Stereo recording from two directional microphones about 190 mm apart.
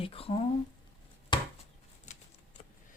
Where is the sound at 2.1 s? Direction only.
40° left (ahead or behind).